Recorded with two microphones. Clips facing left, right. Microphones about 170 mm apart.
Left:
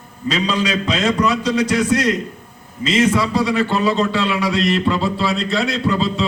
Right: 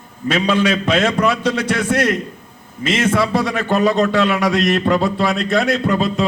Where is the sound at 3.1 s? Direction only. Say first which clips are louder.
Even; 60° right (ahead or behind).